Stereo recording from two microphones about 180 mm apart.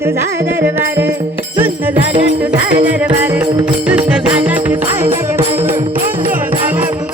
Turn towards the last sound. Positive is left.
turn(degrees=-15)  # may be behind; listen again after turning